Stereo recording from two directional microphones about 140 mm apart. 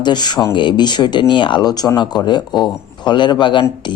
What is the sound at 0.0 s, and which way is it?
Speech, 30° left (ahead or behind).